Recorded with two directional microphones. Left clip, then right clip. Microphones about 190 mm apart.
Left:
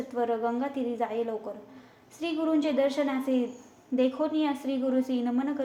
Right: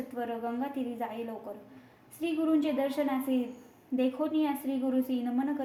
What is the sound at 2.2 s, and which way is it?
A woman's voice, 10° left (ahead or behind).